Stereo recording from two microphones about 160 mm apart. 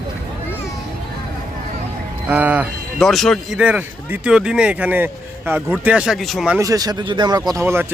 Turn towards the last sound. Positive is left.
turn(degrees=-15)  # may be behind; listen again after turning